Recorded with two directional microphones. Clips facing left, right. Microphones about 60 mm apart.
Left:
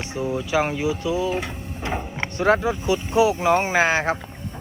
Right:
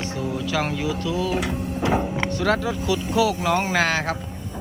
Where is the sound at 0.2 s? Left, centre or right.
Centre.